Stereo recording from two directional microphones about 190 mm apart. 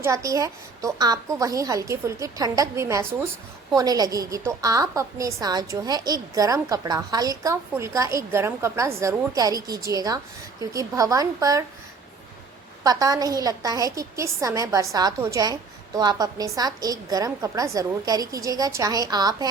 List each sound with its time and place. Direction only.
0.0 s a woman's voice: 15° right (ahead or behind)
12.8 s a woman's voice: 20° right (ahead or behind)